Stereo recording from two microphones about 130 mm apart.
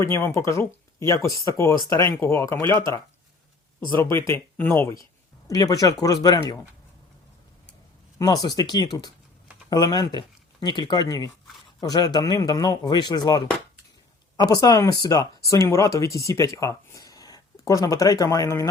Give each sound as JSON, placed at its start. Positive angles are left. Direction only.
{"t": 0.0, "sound": "speech", "side_deg": 20}
{"t": 8.2, "sound": "speech", "side_deg": 30}